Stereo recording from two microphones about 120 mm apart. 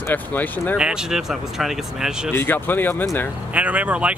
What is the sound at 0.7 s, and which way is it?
Speech, 5° right (ahead or behind).